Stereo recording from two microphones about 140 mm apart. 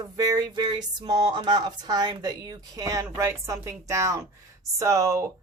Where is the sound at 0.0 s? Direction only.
25° right (ahead or behind).